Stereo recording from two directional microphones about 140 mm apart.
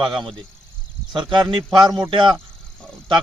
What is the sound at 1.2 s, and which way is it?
Speech, 35° right (ahead or behind).